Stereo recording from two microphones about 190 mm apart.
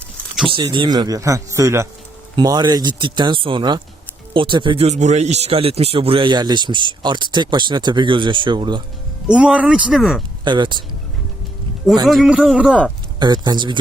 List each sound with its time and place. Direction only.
0.4 s a man's voice: 25° right (ahead or behind)
9.2 s speech: 5° right (ahead or behind)
10.4 s speech: 25° right (ahead or behind)
12.0 s speech: centre (ahead or behind)
13.1 s speech: 25° right (ahead or behind)